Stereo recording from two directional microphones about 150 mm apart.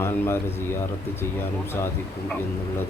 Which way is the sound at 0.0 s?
15° left (ahead or behind).